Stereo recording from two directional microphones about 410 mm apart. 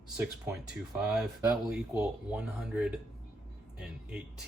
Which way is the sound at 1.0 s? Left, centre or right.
Centre.